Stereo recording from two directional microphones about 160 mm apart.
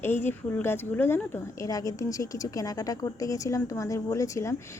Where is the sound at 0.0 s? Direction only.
15° left (ahead or behind).